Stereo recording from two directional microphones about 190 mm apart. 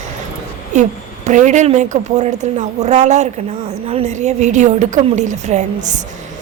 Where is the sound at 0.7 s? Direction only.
40° right (ahead or behind).